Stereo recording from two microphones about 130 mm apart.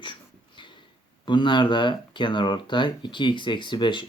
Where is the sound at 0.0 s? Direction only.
40° left (ahead or behind).